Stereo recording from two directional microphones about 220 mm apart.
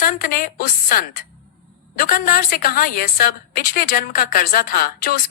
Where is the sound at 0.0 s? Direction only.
40° left (ahead or behind).